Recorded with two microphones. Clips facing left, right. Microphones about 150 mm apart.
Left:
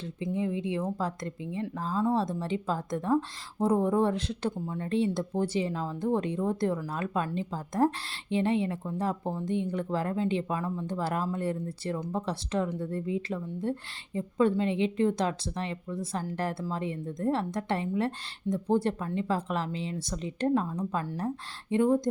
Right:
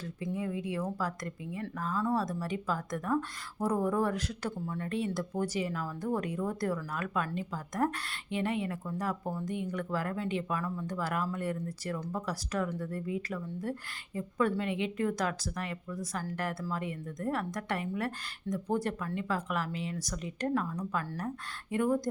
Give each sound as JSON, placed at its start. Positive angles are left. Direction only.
{"t": 0.0, "sound": "speech", "side_deg": 25}